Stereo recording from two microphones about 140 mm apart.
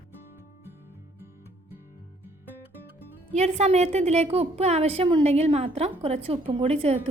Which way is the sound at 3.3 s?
50° right (ahead or behind).